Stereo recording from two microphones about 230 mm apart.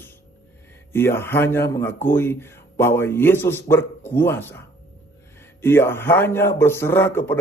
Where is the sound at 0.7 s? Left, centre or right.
Centre.